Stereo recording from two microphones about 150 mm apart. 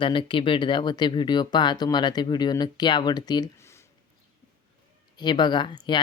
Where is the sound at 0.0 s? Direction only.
35° left (ahead or behind); by 3.8 s 20° left (ahead or behind).